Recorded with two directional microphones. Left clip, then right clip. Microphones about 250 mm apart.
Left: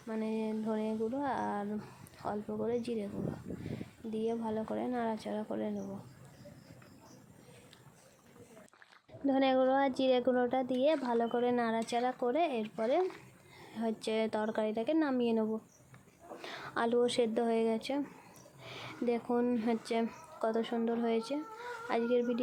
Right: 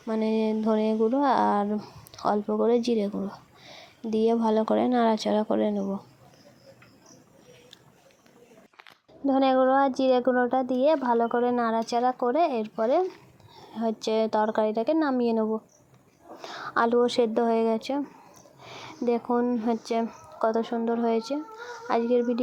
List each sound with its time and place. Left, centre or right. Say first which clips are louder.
0.1 s speech: right 11 dB; right
4.1 s speech: right 13 dB; right
9.2 s speech: right 7 dB; centre